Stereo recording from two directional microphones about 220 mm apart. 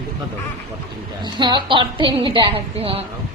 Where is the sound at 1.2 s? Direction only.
20° right (ahead or behind).